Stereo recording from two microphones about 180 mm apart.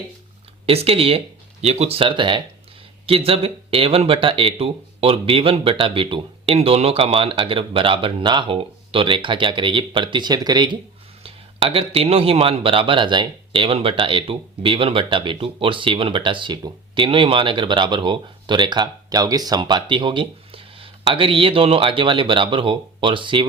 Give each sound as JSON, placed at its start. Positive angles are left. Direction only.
{"t": 0.6, "sound": "speech", "side_deg": -30}